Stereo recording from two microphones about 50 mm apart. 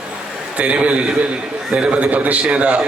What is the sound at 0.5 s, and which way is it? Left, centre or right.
A man's voice, right.